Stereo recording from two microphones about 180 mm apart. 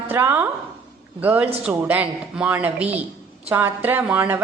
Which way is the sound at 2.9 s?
35° right (ahead or behind).